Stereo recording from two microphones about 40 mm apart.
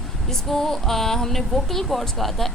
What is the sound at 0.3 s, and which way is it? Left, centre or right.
Speech, centre.